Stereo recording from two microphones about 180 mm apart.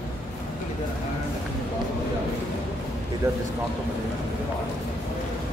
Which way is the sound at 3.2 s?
15° right (ahead or behind).